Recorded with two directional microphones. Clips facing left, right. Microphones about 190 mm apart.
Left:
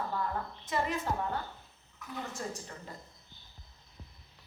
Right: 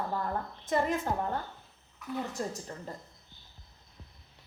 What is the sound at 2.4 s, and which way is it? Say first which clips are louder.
Speech: right 2 dB; 35° right (ahead or behind).